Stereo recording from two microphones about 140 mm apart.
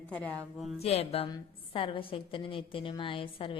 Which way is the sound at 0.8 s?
45° left (ahead or behind).